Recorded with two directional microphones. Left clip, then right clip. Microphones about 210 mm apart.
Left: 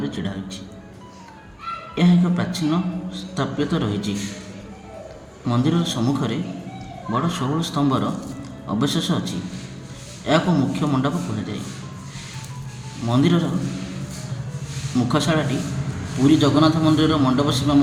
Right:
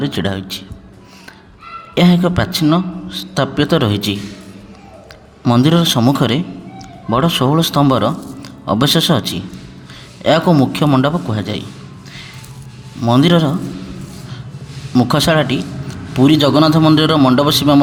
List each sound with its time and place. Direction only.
0.0 s a man's voice: 45° right (ahead or behind)
2.0 s a man's voice: 45° right (ahead or behind)
5.5 s a man's voice: 45° right (ahead or behind)
13.1 s a man's voice: 45° right (ahead or behind)
14.9 s a man's voice: 45° right (ahead or behind)